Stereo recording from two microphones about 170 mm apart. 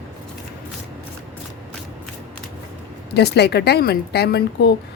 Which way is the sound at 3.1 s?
75° left (ahead or behind).